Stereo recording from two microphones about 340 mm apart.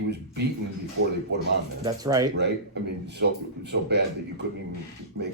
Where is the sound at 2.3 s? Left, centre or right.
Right.